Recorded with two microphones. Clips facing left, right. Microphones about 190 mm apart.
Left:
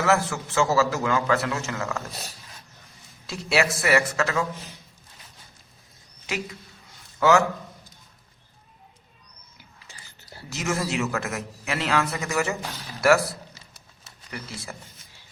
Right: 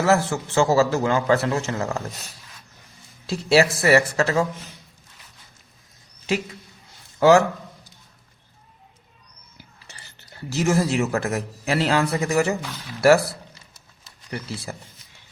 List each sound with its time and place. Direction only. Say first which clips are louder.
0.0 s a man's voice: right 3 dB; 30° right (ahead or behind)
3.2 s a man's voice: right 6 dB; 30° right (ahead or behind)
7.2 s speech: right 5 dB; 30° right (ahead or behind)
10.5 s a man's voice: right 6 dB; 30° right (ahead or behind)
14.3 s a man's voice: right 5 dB; 35° right (ahead or behind)